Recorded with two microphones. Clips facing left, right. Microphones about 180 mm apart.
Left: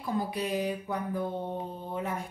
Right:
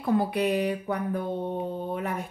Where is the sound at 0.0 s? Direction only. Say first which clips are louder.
Right 7 dB; 65° right (ahead or behind).